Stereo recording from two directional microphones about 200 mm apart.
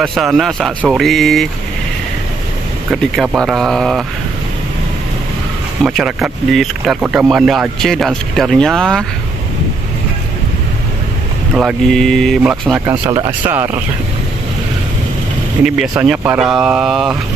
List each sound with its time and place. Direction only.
0.0 s speech: centre (ahead or behind)
2.9 s speech: centre (ahead or behind)
5.9 s speech: 5° right (ahead or behind)
11.5 s speech: centre (ahead or behind)
12.9 s speech: 25° right (ahead or behind)
13.4 s speech: 10° right (ahead or behind)
16.1 s speech: 5° right (ahead or behind)